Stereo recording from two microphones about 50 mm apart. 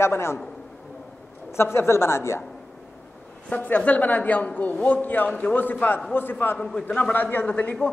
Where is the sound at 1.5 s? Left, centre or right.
Left.